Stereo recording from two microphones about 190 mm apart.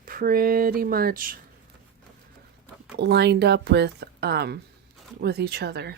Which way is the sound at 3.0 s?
60° right (ahead or behind).